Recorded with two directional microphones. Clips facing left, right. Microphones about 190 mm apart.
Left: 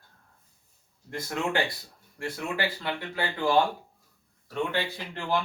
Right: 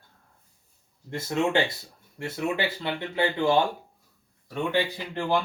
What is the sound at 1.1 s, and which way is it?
Speech, 25° right (ahead or behind).